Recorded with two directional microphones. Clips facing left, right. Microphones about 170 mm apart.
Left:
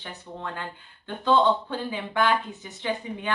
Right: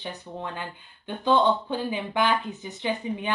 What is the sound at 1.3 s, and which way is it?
A woman's voice, 15° right (ahead or behind).